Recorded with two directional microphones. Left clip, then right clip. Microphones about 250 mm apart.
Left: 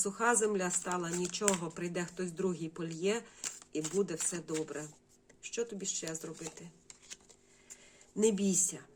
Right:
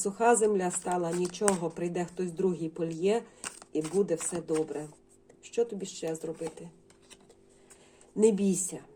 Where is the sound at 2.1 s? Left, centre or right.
Left.